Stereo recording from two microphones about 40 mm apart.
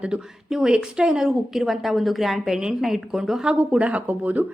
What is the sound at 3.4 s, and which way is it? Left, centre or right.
Speech, right.